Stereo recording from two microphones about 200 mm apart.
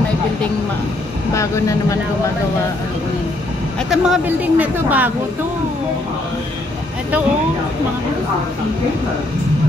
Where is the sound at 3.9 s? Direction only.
5° right (ahead or behind).